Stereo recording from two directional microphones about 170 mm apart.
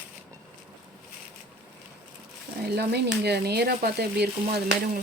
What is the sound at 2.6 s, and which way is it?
Speech, 75° right (ahead or behind).